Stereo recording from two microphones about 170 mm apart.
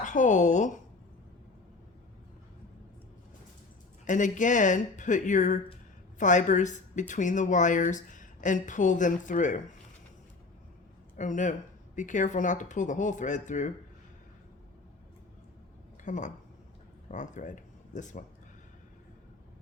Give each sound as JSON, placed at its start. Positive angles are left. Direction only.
{"t": 0.0, "sound": "a woman's voice", "side_deg": 45}
{"t": 4.0, "sound": "a woman's voice", "side_deg": 50}
{"t": 11.2, "sound": "speech", "side_deg": 45}
{"t": 16.0, "sound": "speech", "side_deg": 45}